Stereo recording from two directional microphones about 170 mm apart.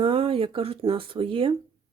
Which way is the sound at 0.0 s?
35° right (ahead or behind).